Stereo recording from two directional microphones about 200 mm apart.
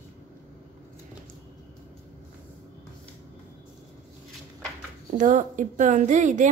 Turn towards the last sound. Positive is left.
turn(degrees=-40)  # may be behind; listen again after turning